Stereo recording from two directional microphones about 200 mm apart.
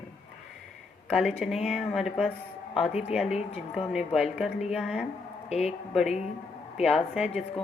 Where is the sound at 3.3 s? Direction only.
35° left (ahead or behind).